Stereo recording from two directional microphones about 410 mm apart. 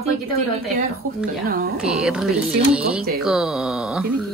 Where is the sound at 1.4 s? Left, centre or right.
Right.